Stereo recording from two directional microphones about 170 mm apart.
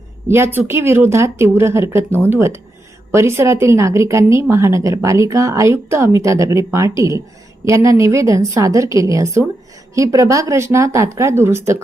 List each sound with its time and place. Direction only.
0.3 s speech: 15° right (ahead or behind)